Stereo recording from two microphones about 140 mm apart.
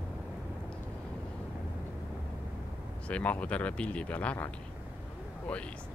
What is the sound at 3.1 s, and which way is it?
Speech, 10° left (ahead or behind).